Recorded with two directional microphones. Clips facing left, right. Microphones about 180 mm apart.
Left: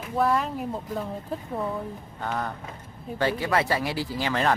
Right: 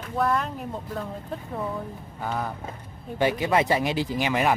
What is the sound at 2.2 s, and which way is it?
Speech, 5° right (ahead or behind).